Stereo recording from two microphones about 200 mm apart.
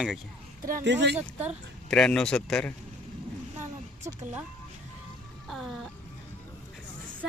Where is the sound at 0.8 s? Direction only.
60° right (ahead or behind).